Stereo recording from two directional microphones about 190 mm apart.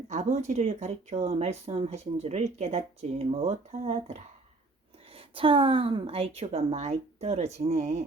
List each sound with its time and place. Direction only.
0.1 s speech: 40° right (ahead or behind)